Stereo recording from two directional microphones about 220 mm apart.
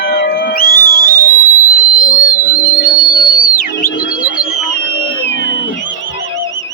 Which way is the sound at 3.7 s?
55° left (ahead or behind).